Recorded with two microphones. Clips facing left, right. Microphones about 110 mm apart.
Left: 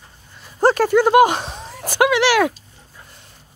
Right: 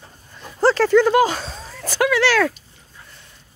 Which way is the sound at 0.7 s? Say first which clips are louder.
Even; 15° left (ahead or behind).